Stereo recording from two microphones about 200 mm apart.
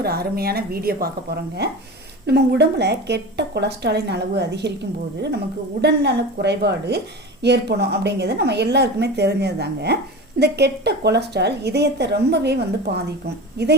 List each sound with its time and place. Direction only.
0.0 s a woman's voice: 50° right (ahead or behind)